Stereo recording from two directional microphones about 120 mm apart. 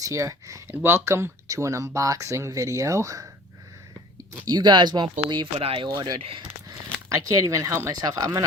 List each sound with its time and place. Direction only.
0.0 s speech: 25° right (ahead or behind)
4.4 s speech: 35° right (ahead or behind)
5.5 s speech: 50° right (ahead or behind)
5.9 s speech: 35° right (ahead or behind)
6.1 s speech: 50° right (ahead or behind)
7.1 s speech: 25° right (ahead or behind)